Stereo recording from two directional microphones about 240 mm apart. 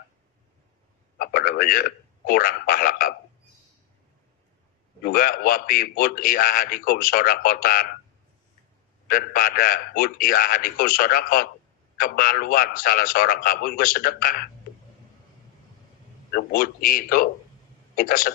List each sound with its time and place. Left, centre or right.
1.1 s speech: left
5.0 s a man's voice: left
9.0 s a man's voice: left
16.3 s a man's voice: left